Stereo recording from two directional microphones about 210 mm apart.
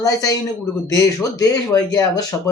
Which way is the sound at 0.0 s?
15° left (ahead or behind).